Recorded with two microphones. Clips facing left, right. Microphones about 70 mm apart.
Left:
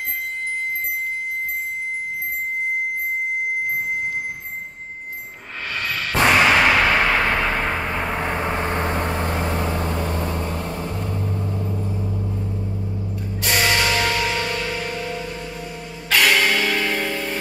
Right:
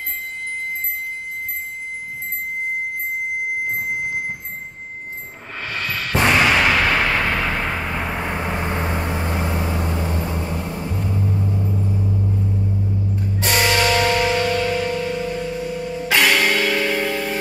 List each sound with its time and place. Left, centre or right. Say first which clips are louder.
6.1 s a sound: left 1 dB; centre
8.5 s vehicle: left 1 dB; centre
13.7 s music: right 2 dB; centre
14.2 s music: right 5 dB; centre
15.9 s music: even; centre
16.7 s church bell: right 2 dB; centre